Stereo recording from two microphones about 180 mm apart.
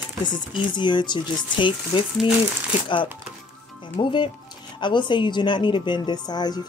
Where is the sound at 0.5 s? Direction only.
25° left (ahead or behind).